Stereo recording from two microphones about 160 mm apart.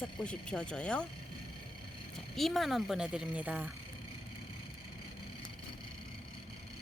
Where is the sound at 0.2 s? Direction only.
5° left (ahead or behind).